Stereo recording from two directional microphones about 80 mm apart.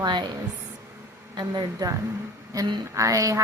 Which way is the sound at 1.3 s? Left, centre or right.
Right.